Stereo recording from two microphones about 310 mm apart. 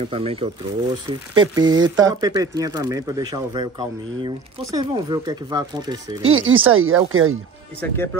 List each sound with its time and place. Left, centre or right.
0.0 s speech: centre
4.7 s speech: centre
6.3 s speech: right
7.8 s speech: centre